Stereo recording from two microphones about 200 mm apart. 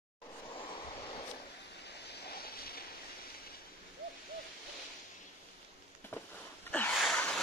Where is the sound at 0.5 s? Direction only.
25° left (ahead or behind).